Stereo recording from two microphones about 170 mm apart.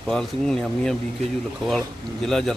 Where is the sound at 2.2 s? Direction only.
5° left (ahead or behind).